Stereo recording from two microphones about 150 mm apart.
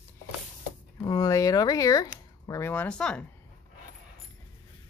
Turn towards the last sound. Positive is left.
turn(degrees=5)  # may be behind; listen again after turning